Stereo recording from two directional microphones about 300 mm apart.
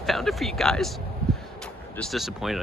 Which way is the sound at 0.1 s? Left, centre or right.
Centre.